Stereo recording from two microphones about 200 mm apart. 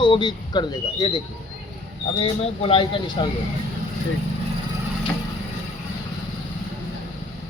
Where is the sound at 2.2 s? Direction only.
25° left (ahead or behind).